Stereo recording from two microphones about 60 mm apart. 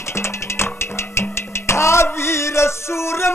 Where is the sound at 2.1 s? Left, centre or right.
Left.